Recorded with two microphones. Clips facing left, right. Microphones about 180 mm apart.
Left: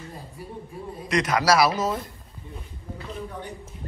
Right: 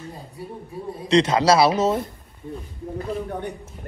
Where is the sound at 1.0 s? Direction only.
25° right (ahead or behind).